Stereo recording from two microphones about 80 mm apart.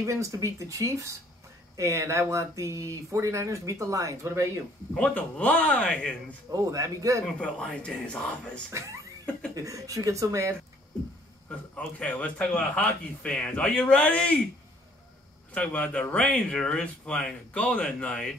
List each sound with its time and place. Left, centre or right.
0.0 s speech: right
4.9 s speech: centre
6.5 s speech: right
7.3 s speech: centre
8.7 s speech: right
12.0 s speech: centre
15.5 s speech: centre